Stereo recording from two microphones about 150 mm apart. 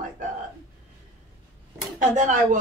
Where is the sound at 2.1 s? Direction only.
55° right (ahead or behind).